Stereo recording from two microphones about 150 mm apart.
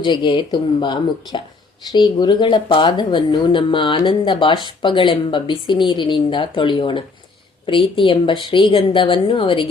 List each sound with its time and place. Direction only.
0.0 s speech: 30° left (ahead or behind)